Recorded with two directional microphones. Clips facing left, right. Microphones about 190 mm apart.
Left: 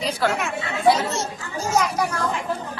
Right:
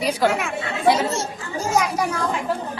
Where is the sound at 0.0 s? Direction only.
10° right (ahead or behind).